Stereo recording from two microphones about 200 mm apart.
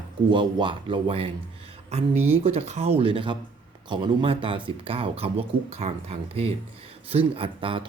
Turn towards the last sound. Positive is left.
turn(degrees=-25)  # may be behind; listen again after turning